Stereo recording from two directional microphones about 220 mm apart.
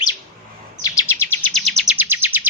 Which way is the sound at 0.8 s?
15° left (ahead or behind).